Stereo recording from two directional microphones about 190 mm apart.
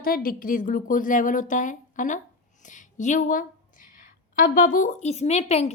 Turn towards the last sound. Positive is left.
turn(degrees=35)  # may be behind; listen again after turning